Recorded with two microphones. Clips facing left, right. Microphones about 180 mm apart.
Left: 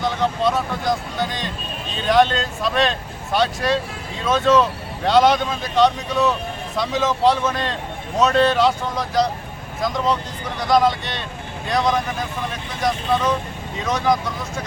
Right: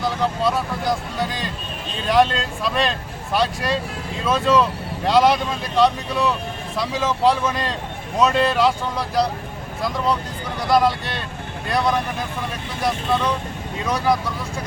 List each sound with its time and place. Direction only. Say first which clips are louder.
0.0 s speech: left 1 dB; 5° right (ahead or behind)
13.8 s speech: left 1 dB; 5° right (ahead or behind)